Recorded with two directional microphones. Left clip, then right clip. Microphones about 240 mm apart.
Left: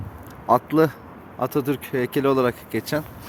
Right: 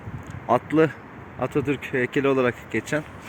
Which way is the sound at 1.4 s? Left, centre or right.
Centre.